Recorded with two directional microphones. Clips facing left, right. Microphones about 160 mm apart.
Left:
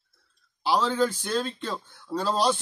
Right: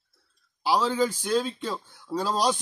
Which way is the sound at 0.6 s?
10° right (ahead or behind).